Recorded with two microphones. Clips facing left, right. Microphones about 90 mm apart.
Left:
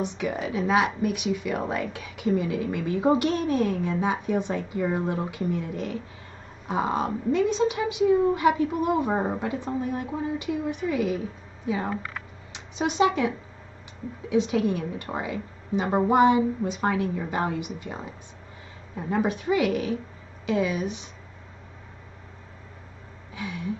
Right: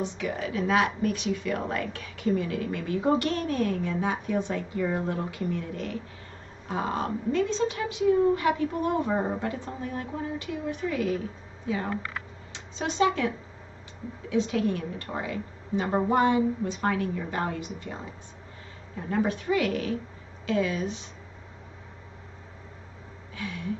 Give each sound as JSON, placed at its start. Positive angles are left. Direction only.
{"t": 0.0, "sound": "speech", "side_deg": 20}
{"t": 14.3, "sound": "speech", "side_deg": 15}
{"t": 19.0, "sound": "speech", "side_deg": 15}
{"t": 23.3, "sound": "a sound", "side_deg": 15}